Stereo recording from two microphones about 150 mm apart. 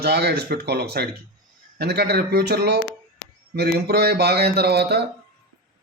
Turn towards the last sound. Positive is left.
turn(degrees=-90)